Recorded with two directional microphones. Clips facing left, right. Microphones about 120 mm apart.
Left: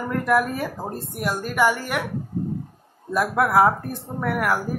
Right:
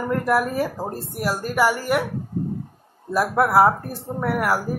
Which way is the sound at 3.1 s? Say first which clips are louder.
Right 1 dB; 5° right (ahead or behind).